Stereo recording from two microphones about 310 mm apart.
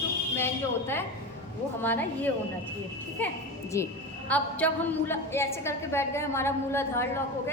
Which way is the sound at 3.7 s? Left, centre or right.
Centre.